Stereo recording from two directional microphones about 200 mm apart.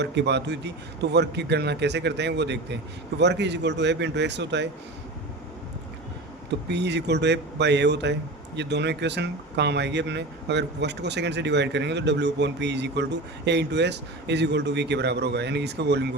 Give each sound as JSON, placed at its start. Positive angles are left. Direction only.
{"t": 0.0, "sound": "speech", "side_deg": -60}
{"t": 6.7, "sound": "speech", "side_deg": -60}